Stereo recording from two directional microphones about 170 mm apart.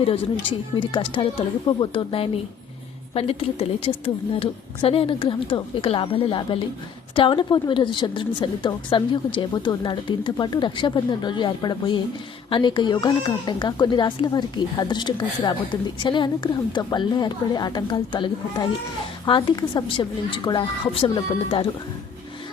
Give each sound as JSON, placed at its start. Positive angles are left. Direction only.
{"t": 0.8, "sound": "a woman's voice", "side_deg": 30}